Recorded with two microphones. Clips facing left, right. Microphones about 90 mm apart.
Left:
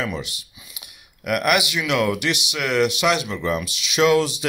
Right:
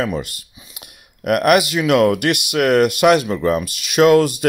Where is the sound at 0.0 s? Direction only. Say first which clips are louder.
Right 5 dB; 45° right (ahead or behind).